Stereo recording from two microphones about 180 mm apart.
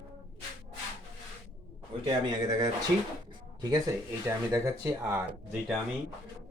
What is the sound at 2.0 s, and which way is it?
Speech, 20° right (ahead or behind).